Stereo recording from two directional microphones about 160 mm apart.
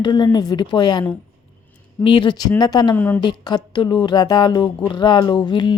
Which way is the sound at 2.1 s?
30° left (ahead or behind).